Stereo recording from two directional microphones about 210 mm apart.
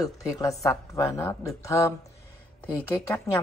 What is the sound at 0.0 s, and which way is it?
A woman's voice, 15° left (ahead or behind).